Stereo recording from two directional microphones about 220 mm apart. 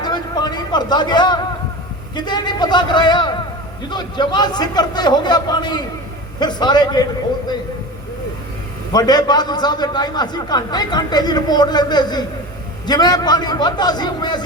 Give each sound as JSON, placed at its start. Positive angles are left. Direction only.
{"t": 0.0, "sound": "a sound", "side_deg": 20}
{"t": 2.1, "sound": "a man's voice", "side_deg": 20}
{"t": 8.9, "sound": "a man's voice", "side_deg": 20}